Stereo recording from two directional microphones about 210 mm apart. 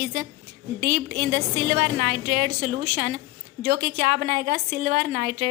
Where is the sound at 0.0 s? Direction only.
40° right (ahead or behind).